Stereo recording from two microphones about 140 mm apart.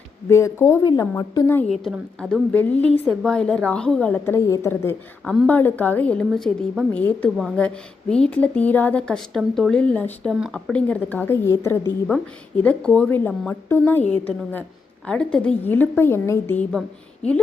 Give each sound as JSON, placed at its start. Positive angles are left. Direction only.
{"t": 0.3, "sound": "a woman's voice", "side_deg": 20}
{"t": 1.9, "sound": "a woman's voice", "side_deg": 0}
{"t": 4.4, "sound": "a woman's voice", "side_deg": 20}
{"t": 5.2, "sound": "speech", "side_deg": 0}
{"t": 5.5, "sound": "a woman's voice", "side_deg": 15}
{"t": 12.0, "sound": "a woman's voice", "side_deg": 5}